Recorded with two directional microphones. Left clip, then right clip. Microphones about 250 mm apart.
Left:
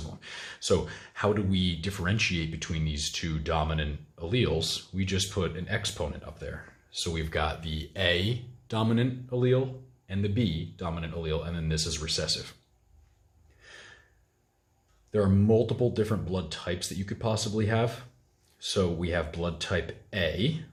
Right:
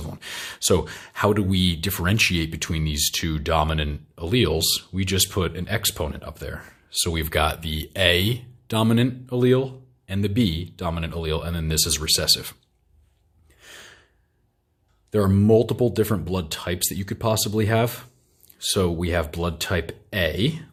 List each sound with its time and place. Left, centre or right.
0.1 s speech: right
13.6 s gasp: right
15.1 s speech: right